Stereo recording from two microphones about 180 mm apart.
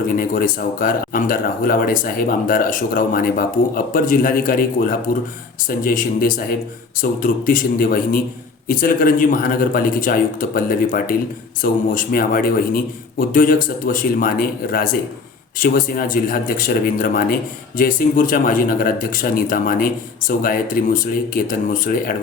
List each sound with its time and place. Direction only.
0.1 s speech: 50° left (ahead or behind)